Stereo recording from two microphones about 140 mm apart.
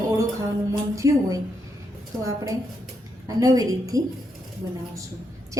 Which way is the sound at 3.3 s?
25° right (ahead or behind).